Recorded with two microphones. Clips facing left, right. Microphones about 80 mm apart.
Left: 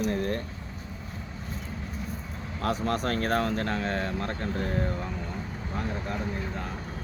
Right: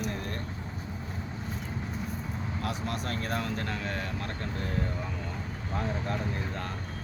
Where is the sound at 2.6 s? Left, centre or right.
Left.